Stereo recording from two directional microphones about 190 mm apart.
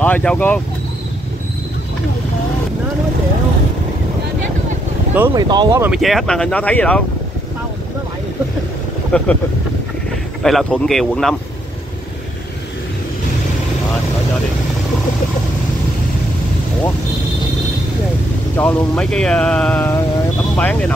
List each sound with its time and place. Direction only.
0.0 s speech: 5° left (ahead or behind)
5.1 s speech: 10° right (ahead or behind)
5.9 s speech: centre (ahead or behind)
9.1 s speech: 5° left (ahead or behind)
10.4 s speech: 5° left (ahead or behind)
18.6 s speech: 5° left (ahead or behind)